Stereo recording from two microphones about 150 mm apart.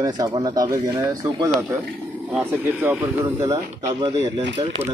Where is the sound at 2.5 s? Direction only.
15° right (ahead or behind).